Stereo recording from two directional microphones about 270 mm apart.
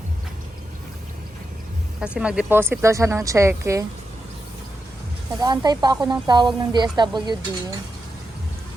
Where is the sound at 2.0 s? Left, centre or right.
Centre.